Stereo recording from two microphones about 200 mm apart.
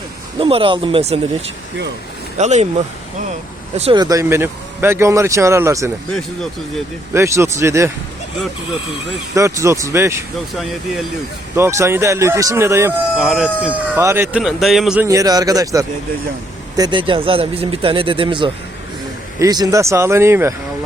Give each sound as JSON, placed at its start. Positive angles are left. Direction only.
{"t": 0.3, "sound": "speech", "side_deg": -25}
{"t": 3.8, "sound": "speech", "side_deg": -25}
{"t": 6.1, "sound": "speech", "side_deg": 0}
{"t": 7.1, "sound": "speech", "side_deg": -15}
{"t": 9.3, "sound": "speech", "side_deg": -15}
{"t": 10.5, "sound": "speech", "side_deg": 0}
{"t": 11.5, "sound": "speech", "side_deg": -15}
{"t": 13.2, "sound": "speech", "side_deg": -5}
{"t": 15.0, "sound": "speech", "side_deg": -15}